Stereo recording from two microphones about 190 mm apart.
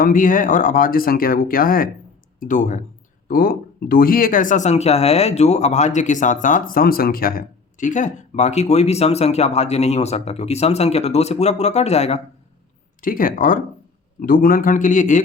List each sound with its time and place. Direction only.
0.0 s speech: 45° left (ahead or behind)
13.0 s speech: 45° left (ahead or behind)